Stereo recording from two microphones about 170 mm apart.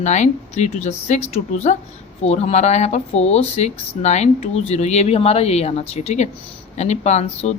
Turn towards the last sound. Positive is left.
turn(degrees=40)  # may be behind; listen again after turning